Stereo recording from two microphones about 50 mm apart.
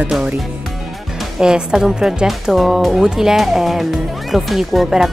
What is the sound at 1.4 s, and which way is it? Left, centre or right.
Speech, centre.